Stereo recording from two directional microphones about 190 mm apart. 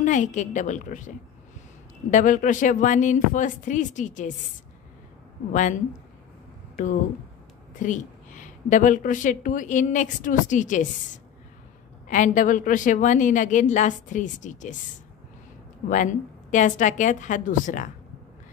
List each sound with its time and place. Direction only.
0.0 s a woman's voice: 40° left (ahead or behind)
5.5 s a woman's voice: 40° left (ahead or behind)
7.8 s a woman's voice: 40° left (ahead or behind)
12.1 s a woman's voice: 45° left (ahead or behind)
15.9 s a woman's voice: 40° left (ahead or behind)